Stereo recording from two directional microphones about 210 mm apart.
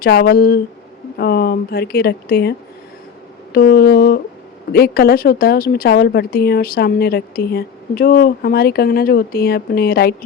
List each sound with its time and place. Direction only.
0.0 s a woman's voice: 45° left (ahead or behind)